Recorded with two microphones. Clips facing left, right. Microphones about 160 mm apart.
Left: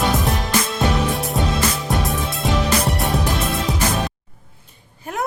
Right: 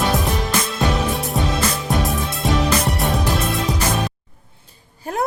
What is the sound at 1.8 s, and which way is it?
Music, centre (ahead or behind).